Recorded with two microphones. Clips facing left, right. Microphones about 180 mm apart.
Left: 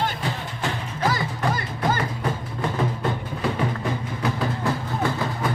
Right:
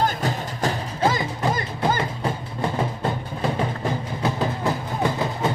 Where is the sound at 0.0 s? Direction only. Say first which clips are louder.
Right 3 dB; 40° right (ahead or behind).